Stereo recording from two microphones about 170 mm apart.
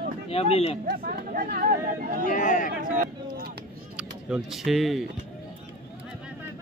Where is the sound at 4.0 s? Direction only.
5° right (ahead or behind).